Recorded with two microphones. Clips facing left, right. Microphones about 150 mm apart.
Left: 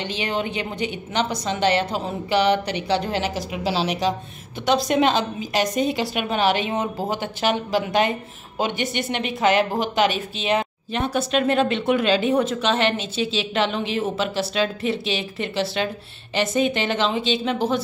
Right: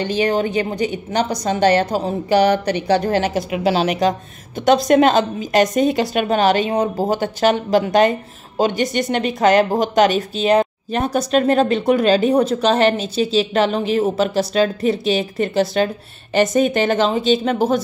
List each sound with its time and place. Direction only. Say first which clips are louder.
0.0 s a woman's voice: right 8 dB; 45° right (ahead or behind)